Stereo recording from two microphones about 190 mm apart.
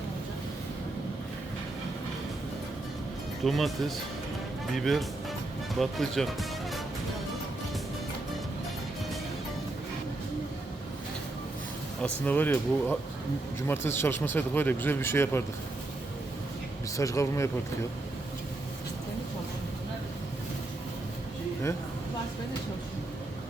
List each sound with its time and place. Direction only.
3.4 s speech: centre (ahead or behind)
12.0 s speech: 10° left (ahead or behind)
17.0 s speech: 15° left (ahead or behind)